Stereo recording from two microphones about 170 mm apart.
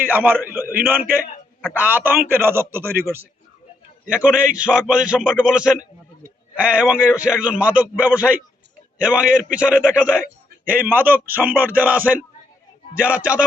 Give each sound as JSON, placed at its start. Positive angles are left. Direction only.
{"t": 0.0, "sound": "a man's voice", "side_deg": -10}
{"t": 4.1, "sound": "a man's voice", "side_deg": -5}
{"t": 4.4, "sound": "a man's voice", "side_deg": -50}
{"t": 4.6, "sound": "a man's voice", "side_deg": -5}